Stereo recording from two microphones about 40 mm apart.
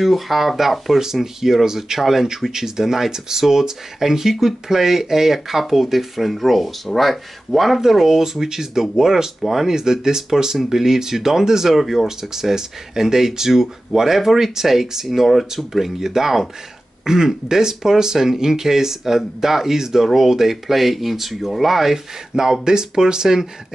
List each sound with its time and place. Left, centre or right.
0.0 s speech: centre
9.8 s speech: centre
12.2 s speech: centre